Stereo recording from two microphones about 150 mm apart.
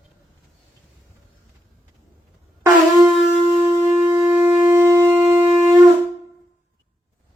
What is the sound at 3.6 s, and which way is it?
Shofar, 15° right (ahead or behind).